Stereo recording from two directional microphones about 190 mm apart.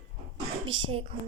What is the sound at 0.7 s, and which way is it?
Speech, 30° right (ahead or behind).